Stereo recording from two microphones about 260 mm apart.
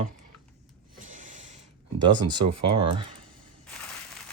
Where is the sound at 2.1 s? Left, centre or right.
Centre.